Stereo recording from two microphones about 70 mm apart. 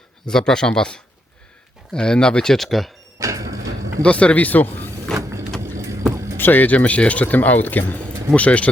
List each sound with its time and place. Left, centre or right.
0.3 s speech: centre
3.2 s a sound: right
4.0 s speech: centre
5.7 s vehicle: right
6.3 s speech: left